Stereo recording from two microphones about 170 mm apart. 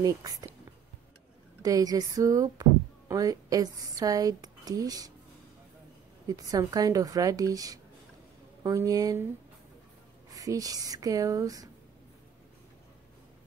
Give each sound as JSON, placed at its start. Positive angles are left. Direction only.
{"t": 0.0, "sound": "speech", "side_deg": -20}
{"t": 1.6, "sound": "speech", "side_deg": -20}
{"t": 6.2, "sound": "speech", "side_deg": -20}
{"t": 10.3, "sound": "speech", "side_deg": -20}